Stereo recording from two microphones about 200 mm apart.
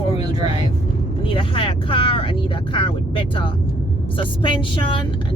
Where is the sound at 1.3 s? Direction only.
25° left (ahead or behind).